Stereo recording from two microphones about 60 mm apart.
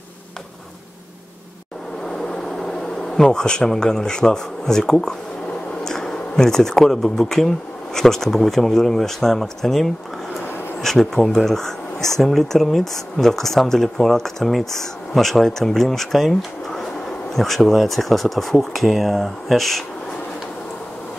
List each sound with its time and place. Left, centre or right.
2.0 s speech: centre